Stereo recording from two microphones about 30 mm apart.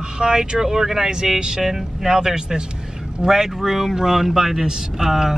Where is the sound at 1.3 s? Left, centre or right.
Right.